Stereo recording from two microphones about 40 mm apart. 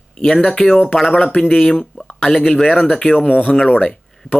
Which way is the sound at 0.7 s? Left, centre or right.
Left.